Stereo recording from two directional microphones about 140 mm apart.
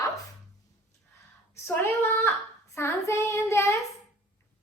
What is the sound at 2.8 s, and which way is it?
Child singing, 20° left (ahead or behind).